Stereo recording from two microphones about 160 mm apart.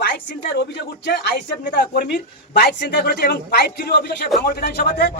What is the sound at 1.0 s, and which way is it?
Speech, 85° left.